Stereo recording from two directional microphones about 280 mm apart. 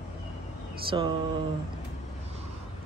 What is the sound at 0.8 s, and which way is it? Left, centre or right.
Speech, centre.